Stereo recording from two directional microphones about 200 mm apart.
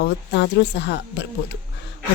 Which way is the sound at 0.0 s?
60° left (ahead or behind).